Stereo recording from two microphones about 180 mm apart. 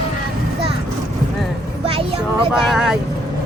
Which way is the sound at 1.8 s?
30° right (ahead or behind).